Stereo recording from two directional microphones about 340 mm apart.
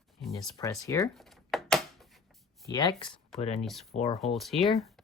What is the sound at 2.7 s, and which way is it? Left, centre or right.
Speech, centre.